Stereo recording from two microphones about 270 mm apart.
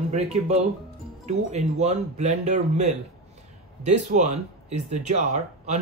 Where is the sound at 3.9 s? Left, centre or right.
Right.